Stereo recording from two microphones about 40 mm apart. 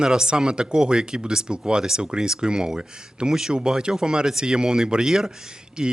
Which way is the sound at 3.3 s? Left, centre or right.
Centre.